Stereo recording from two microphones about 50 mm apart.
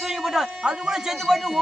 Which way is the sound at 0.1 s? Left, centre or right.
Centre.